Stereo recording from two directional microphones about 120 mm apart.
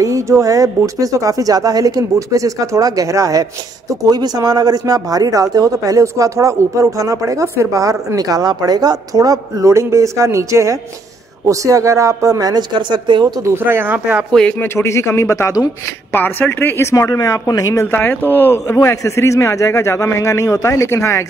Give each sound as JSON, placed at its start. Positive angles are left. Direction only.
{"t": 0.0, "sound": "speech", "side_deg": -25}
{"t": 13.4, "sound": "speech", "side_deg": -20}
{"t": 14.6, "sound": "a man's voice", "side_deg": 25}
{"t": 16.1, "sound": "a man's voice", "side_deg": 15}
{"t": 17.9, "sound": "a man's voice", "side_deg": 15}